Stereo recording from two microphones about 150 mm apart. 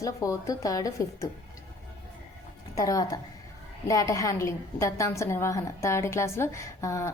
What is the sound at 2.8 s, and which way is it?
A woman's voice, 25° left (ahead or behind).